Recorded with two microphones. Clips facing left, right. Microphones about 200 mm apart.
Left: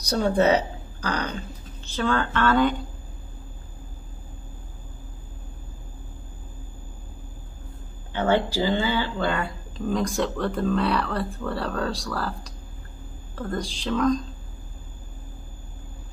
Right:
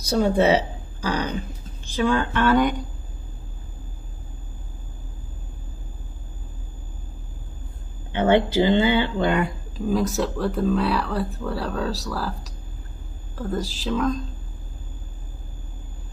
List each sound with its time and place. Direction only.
0.0 s speech: 10° right (ahead or behind)
8.1 s speech: 20° right (ahead or behind)
9.8 s speech: 5° right (ahead or behind)